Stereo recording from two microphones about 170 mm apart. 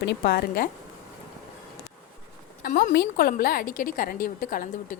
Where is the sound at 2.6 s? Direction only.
55° left (ahead or behind).